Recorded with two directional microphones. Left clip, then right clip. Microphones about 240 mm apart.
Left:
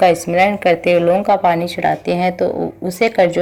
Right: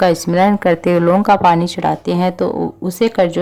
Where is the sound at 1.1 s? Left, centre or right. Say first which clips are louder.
Right 2 dB; right.